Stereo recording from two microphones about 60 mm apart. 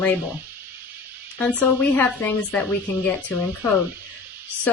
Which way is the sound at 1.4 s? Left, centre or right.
Left.